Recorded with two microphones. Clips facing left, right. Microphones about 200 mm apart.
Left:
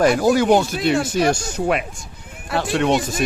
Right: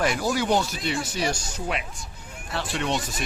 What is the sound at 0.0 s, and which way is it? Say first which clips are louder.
Speech: left 9 dB; 50° left (ahead or behind).